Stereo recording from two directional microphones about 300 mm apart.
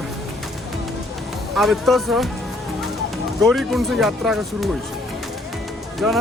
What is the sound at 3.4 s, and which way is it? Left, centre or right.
Speech, centre.